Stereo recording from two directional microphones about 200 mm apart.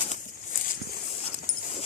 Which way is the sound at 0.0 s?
40° left (ahead or behind).